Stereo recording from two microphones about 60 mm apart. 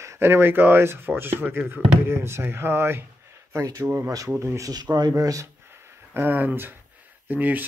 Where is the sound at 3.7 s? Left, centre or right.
Right.